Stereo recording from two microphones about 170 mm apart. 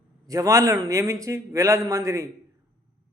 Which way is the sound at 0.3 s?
20° right (ahead or behind).